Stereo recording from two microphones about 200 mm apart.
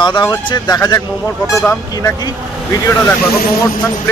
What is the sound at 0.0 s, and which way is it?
Speech, 20° left (ahead or behind).